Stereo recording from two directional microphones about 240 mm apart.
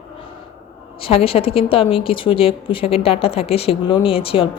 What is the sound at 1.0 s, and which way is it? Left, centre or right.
Speech, left.